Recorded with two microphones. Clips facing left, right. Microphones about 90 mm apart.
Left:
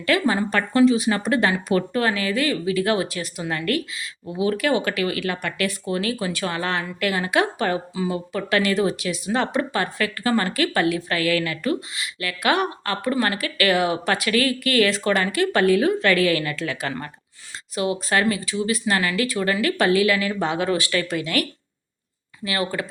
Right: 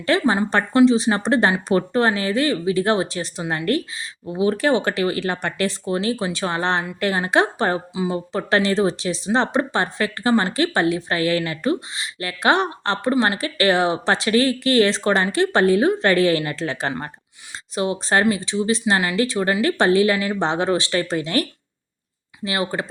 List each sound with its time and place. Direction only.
0.0 s speech: 30° right (ahead or behind)
22.4 s speech: 25° right (ahead or behind)